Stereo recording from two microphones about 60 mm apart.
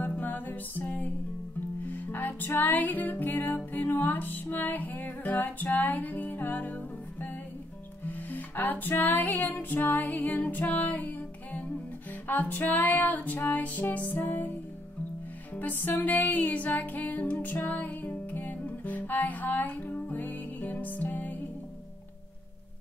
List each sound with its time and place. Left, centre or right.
0.2 s music: left
15.5 s music: left